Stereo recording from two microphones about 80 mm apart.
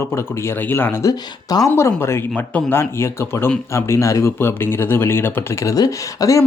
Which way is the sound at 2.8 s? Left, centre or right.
Left.